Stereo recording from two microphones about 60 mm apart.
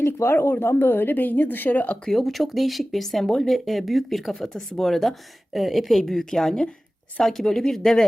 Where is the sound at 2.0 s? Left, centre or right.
Centre.